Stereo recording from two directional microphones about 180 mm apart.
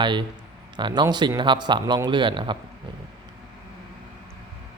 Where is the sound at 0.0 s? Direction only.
25° right (ahead or behind).